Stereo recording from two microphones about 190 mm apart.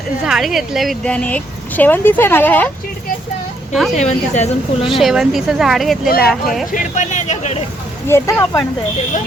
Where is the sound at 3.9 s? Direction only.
35° left (ahead or behind).